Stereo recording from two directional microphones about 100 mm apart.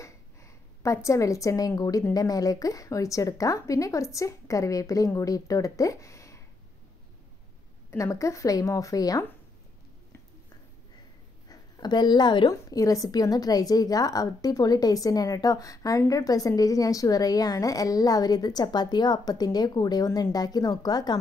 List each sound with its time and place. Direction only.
0.0 s a sound: 30° left (ahead or behind)
1.8 s a woman's voice: 40° left (ahead or behind)
8.0 s a woman's voice: 30° left (ahead or behind)
11.4 s speech: 40° left (ahead or behind)
12.6 s a woman's voice: 35° left (ahead or behind)